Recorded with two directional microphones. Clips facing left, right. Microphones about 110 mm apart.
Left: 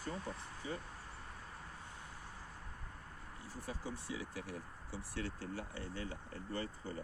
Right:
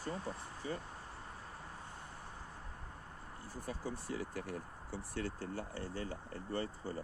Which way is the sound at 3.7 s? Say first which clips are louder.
Right 3 dB; 50° right (ahead or behind).